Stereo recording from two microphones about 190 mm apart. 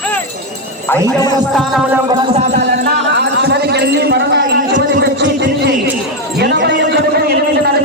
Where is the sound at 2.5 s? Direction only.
60° right (ahead or behind).